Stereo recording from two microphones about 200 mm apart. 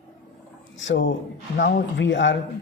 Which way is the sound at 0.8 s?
70° left (ahead or behind).